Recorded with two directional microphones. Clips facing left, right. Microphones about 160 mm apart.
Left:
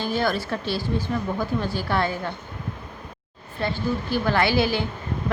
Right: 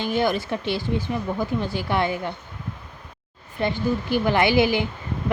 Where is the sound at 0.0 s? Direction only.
20° right (ahead or behind).